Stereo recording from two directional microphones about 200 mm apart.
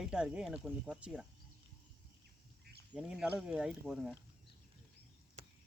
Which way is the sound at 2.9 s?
5° right (ahead or behind).